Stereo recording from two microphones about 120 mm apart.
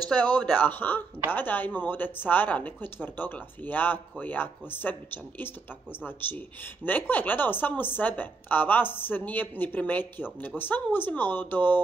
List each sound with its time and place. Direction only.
0.1 s speech: 10° left (ahead or behind)